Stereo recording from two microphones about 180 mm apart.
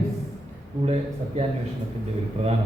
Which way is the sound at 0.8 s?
35° right (ahead or behind).